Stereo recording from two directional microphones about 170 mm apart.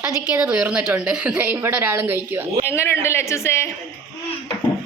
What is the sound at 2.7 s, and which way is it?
Speech, 15° left (ahead or behind).